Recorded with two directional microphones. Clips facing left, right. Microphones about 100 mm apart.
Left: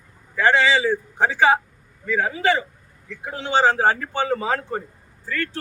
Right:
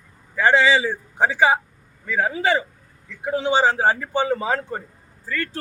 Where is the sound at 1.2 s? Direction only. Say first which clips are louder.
Even; 5° right (ahead or behind).